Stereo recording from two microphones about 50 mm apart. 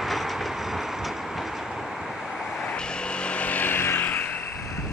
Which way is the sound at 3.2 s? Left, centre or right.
Left.